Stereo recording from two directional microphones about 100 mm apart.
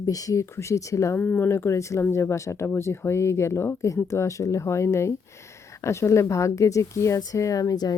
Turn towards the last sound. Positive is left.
turn(degrees=40)  # may be behind; listen again after turning